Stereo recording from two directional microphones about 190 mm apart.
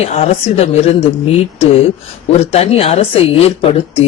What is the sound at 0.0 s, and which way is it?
Speech, 30° left (ahead or behind).